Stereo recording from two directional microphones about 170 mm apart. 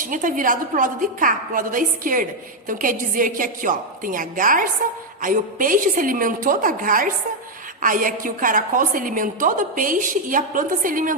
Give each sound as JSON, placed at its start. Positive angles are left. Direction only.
{"t": 0.0, "sound": "a woman's voice", "side_deg": -50}